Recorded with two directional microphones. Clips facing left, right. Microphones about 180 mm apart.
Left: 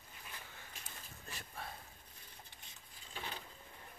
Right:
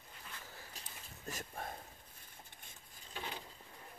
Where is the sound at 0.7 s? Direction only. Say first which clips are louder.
Even; 40° right (ahead or behind).